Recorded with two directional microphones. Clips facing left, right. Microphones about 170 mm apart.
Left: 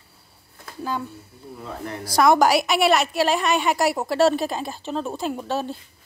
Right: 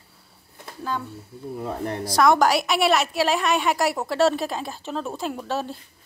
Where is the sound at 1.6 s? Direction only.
40° right (ahead or behind).